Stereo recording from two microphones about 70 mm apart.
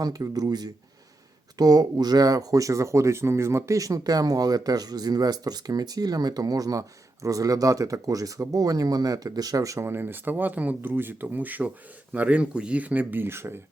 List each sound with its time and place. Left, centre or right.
0.0 s speech: right
9.8 s speech: right